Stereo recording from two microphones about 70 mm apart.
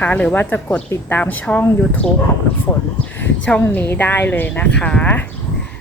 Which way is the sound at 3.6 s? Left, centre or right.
Left.